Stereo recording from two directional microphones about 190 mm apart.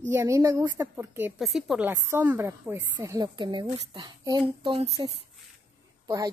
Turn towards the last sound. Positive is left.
turn(degrees=-20)  # may be behind; listen again after turning